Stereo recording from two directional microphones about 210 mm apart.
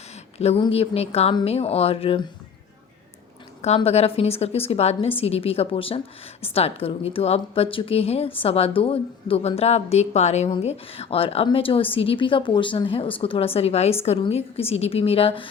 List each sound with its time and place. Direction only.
0.3 s a woman's voice: 30° left (ahead or behind)
3.6 s a woman's voice: 30° left (ahead or behind)